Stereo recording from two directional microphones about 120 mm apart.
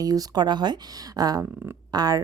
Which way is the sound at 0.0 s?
30° right (ahead or behind).